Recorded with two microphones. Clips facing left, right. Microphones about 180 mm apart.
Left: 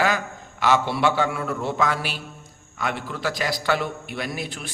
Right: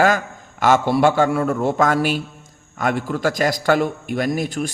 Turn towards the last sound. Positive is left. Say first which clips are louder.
# right 9 dB
turn(degrees=-45)  # may be behind; listen again after turning